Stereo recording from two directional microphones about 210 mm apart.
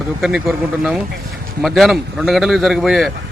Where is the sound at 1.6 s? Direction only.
Centre (ahead or behind).